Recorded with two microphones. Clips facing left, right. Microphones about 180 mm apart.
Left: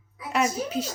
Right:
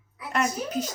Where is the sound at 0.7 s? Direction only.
40° right (ahead or behind).